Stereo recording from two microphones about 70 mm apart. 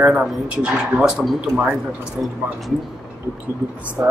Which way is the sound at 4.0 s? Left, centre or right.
Right.